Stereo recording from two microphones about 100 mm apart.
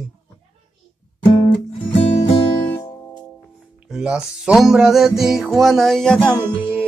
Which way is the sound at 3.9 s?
10° right (ahead or behind).